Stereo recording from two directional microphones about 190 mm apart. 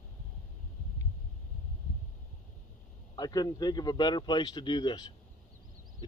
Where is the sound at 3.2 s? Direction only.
20° left (ahead or behind).